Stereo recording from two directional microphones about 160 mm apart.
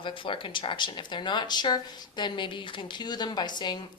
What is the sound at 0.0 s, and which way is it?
Speech, 30° left (ahead or behind).